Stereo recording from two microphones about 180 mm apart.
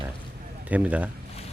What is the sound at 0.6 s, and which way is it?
Speech, 10° right (ahead or behind).